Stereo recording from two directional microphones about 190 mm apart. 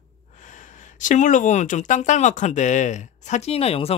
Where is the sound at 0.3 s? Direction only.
40° left (ahead or behind).